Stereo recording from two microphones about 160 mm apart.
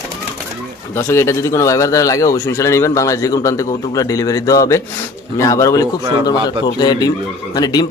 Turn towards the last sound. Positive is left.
turn(degrees=25)  # may be behind; listen again after turning